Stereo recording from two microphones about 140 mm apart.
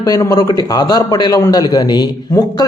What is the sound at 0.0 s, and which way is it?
A man's voice, 25° left (ahead or behind).